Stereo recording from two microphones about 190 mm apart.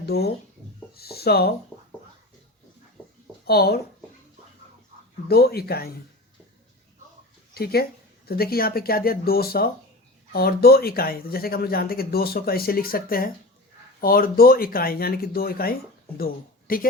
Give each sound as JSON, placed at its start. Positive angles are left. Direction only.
{"t": 0.0, "sound": "speech", "side_deg": 55}
{"t": 0.9, "sound": "a sound", "side_deg": 55}
{"t": 3.4, "sound": "speech", "side_deg": 55}
{"t": 5.3, "sound": "speech", "side_deg": 55}
{"t": 7.5, "sound": "speech", "side_deg": 55}